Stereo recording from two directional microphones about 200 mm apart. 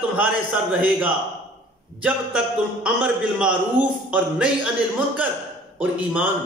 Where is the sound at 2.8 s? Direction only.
5° right (ahead or behind).